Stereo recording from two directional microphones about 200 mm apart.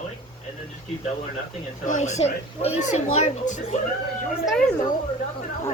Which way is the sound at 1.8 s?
35° left (ahead or behind).